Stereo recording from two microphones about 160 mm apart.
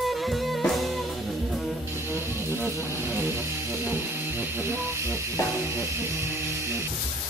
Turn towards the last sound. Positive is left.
turn(degrees=-15)  # may be behind; listen again after turning